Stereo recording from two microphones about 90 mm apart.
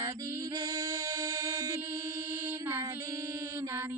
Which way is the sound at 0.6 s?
45° right (ahead or behind).